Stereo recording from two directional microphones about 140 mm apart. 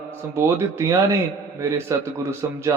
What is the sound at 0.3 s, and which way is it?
A man's voice, 20° right (ahead or behind).